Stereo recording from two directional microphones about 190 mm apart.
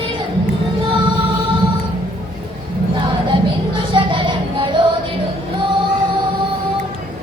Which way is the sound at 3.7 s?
25° right (ahead or behind).